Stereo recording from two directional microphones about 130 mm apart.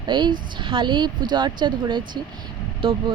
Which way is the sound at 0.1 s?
35° right (ahead or behind).